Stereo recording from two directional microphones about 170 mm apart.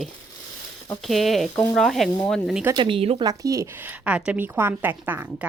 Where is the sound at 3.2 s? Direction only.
20° right (ahead or behind).